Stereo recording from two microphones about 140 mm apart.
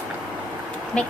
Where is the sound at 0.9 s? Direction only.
5° left (ahead or behind).